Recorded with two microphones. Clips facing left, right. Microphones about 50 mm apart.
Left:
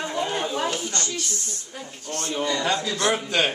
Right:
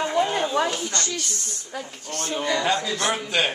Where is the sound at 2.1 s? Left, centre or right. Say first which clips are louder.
Left 1 dB; centre.